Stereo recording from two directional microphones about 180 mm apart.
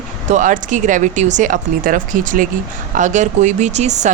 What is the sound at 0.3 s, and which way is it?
Speech, 45° right (ahead or behind).